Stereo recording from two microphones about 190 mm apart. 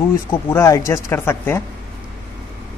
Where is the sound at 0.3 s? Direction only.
15° left (ahead or behind).